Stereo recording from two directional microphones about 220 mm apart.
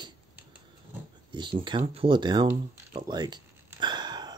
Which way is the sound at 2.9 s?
20° right (ahead or behind).